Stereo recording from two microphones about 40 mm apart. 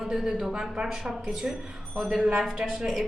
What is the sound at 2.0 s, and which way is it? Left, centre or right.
A woman's voice, centre.